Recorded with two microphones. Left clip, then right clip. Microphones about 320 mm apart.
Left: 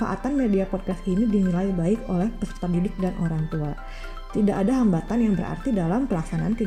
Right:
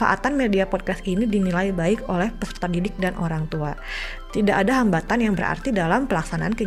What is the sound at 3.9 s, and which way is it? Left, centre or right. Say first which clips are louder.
Speech: right 7 dB; right.